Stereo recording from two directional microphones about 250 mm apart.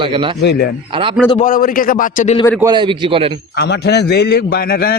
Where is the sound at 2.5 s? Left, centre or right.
Centre.